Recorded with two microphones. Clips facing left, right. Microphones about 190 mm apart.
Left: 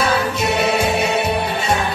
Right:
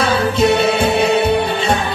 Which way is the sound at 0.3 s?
30° right (ahead or behind).